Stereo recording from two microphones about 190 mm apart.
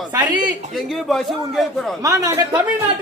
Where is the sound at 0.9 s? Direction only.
Centre (ahead or behind).